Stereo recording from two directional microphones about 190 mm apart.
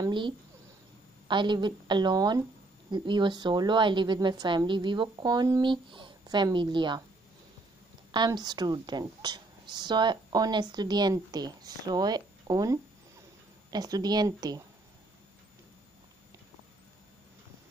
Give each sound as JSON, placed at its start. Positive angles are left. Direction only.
{"t": 0.0, "sound": "a woman's voice", "side_deg": -25}
{"t": 8.1, "sound": "a woman's voice", "side_deg": -25}